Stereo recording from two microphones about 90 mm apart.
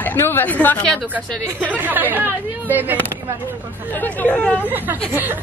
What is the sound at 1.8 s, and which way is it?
A woman's voice, 20° right (ahead or behind).